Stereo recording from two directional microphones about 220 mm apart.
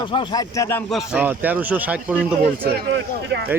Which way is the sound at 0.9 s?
5° right (ahead or behind).